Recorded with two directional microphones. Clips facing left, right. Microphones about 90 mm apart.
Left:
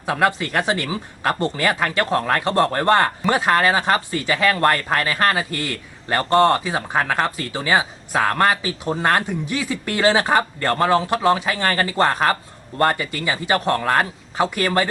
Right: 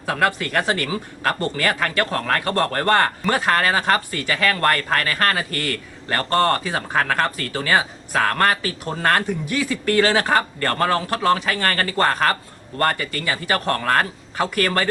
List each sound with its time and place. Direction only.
0.0 s speech: 20° left (ahead or behind)